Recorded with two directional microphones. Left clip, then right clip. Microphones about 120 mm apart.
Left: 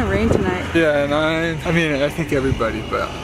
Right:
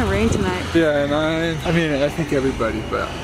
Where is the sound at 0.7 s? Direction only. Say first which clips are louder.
Left 1 dB; 5° left (ahead or behind).